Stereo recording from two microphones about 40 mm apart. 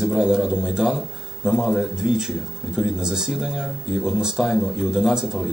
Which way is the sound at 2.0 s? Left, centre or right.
Centre.